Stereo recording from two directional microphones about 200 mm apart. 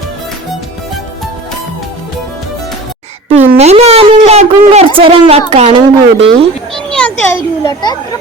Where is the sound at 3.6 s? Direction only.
30° right (ahead or behind).